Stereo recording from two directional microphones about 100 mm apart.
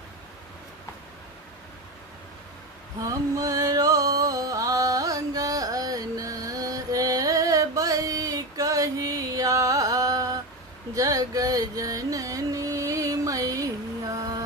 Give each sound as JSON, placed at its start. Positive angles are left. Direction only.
{"t": 3.0, "sound": "music", "side_deg": -35}